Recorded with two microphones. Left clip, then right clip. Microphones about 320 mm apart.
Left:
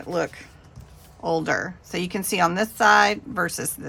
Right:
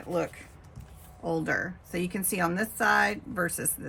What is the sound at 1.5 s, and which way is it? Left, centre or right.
Speech, centre.